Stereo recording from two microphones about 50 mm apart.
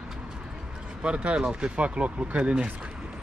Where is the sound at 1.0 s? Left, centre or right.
Centre.